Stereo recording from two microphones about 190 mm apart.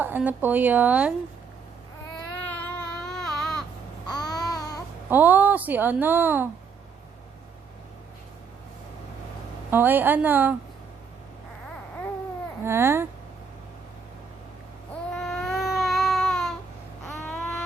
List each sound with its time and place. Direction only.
0.0 s a woman's voice: 10° right (ahead or behind)
2.4 s baby cry: 5° left (ahead or behind)
4.0 s babbling: 20° left (ahead or behind)
5.0 s a woman's voice: 10° right (ahead or behind)
9.6 s a woman's voice: 10° right (ahead or behind)
12.6 s a woman's voice: 10° right (ahead or behind)
15.1 s baby cry: centre (ahead or behind)
17.2 s a sound: 5° left (ahead or behind)